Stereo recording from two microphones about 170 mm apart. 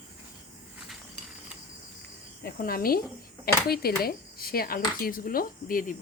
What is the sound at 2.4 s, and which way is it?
Speech, 60° left (ahead or behind).